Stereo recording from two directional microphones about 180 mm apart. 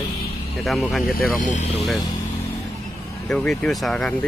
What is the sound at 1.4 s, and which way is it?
Speech, 40° left (ahead or behind).